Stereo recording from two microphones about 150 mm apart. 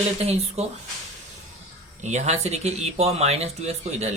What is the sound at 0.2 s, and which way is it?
Speech, 45° right (ahead or behind).